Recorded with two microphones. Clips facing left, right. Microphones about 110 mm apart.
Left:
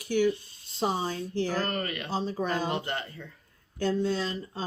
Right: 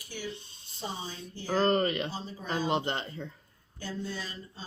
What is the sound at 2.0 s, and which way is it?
Speech, 65° left (ahead or behind).